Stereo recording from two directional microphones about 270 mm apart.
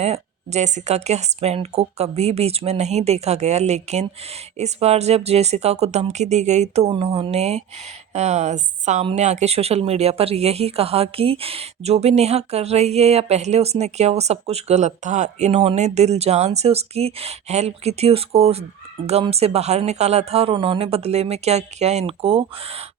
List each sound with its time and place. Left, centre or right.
0.0 s a woman's voice: right